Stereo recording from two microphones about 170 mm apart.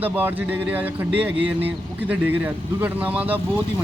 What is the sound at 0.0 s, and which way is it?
Speech, 10° right (ahead or behind).